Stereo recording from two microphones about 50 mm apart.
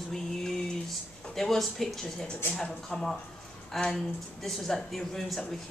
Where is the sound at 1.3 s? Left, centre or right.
Centre.